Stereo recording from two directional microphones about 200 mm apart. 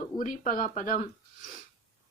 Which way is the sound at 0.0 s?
40° left (ahead or behind).